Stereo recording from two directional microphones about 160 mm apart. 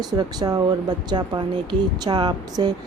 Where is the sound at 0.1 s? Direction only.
25° right (ahead or behind).